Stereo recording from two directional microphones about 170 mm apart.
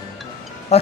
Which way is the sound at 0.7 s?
40° left (ahead or behind).